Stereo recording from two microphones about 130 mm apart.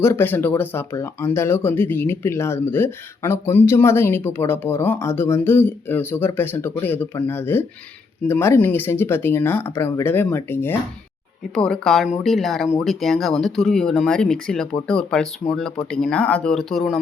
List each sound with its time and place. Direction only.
0.0 s speech: 20° left (ahead or behind)
11.5 s speech: 5° left (ahead or behind)